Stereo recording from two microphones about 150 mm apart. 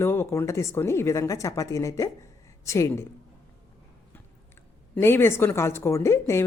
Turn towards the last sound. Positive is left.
turn(degrees=20)  # may be behind; listen again after turning